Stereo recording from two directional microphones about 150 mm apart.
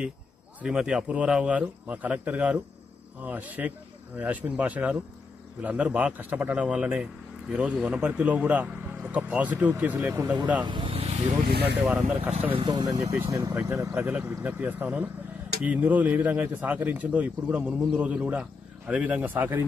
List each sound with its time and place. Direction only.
0.6 s speech: 5° right (ahead or behind)
10.6 s vehicle: 35° right (ahead or behind)
11.4 s speech: 90° right
12.0 s speech: 50° right (ahead or behind)
12.4 s speech: 35° right (ahead or behind)
13.9 s speech: 10° right (ahead or behind)